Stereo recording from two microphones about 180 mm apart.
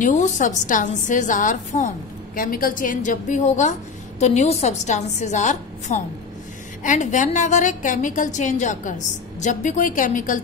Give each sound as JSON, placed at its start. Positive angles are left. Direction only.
{"t": 0.0, "sound": "a woman's voice", "side_deg": 45}